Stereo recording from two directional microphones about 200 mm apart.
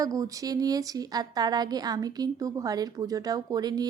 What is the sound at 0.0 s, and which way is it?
A woman's voice, 15° right (ahead or behind).